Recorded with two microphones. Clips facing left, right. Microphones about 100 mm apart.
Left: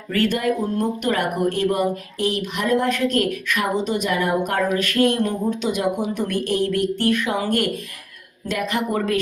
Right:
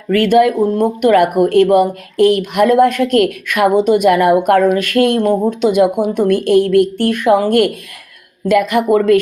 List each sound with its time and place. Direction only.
0.3 s speech: 65° right (ahead or behind)
8.4 s speech: 60° right (ahead or behind)